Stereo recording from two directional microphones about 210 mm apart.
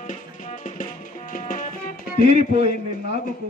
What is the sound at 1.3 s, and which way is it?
Music, 40° left (ahead or behind).